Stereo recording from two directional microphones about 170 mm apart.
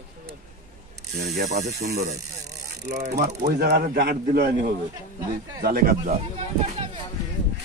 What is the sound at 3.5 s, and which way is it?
A man's voice, 65° right (ahead or behind).